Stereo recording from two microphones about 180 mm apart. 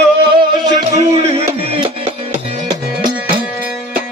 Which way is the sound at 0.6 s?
25° right (ahead or behind).